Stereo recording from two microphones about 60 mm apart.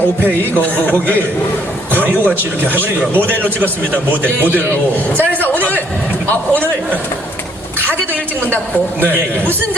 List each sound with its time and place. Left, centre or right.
0.5 s speech: left
2.0 s speech: right
6.5 s speech: left